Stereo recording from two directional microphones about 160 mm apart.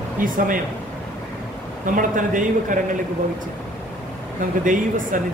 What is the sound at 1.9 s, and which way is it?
Speech, 55° right (ahead or behind).